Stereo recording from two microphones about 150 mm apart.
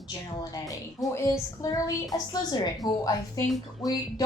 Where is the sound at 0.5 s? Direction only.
20° left (ahead or behind).